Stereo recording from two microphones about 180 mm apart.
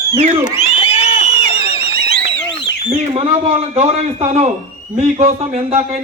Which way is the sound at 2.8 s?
35° right (ahead or behind).